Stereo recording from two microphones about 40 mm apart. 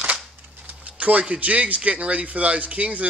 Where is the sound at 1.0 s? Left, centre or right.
Right.